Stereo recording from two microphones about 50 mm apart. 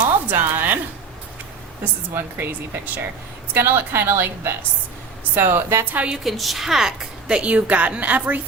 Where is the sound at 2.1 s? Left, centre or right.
Right.